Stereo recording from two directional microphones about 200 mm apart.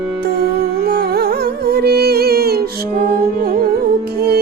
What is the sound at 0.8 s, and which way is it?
Music, 50° right (ahead or behind).